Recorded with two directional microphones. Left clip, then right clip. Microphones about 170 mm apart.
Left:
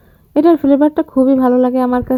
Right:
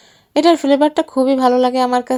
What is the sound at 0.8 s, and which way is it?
Speech, 55° right (ahead or behind).